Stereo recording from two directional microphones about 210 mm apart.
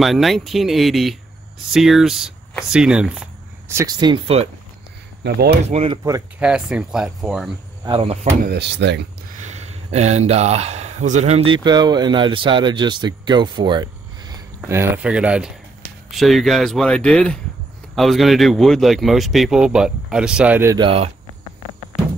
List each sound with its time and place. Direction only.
0.0 s speech: centre (ahead or behind); by 4.5 s 25° right (ahead or behind)
5.2 s speech: 55° right (ahead or behind)
5.7 s speech: 30° right (ahead or behind)
6.4 s speech: 5° right (ahead or behind)
7.8 s speech: 25° right (ahead or behind); by 9.0 s 55° right (ahead or behind)
9.4 s speech: 30° right (ahead or behind)
14.6 s speech: 10° right (ahead or behind)
20.7 s speech: 25° right (ahead or behind)